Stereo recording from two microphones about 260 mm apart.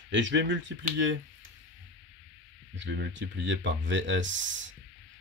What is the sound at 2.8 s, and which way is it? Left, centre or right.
Speech, right.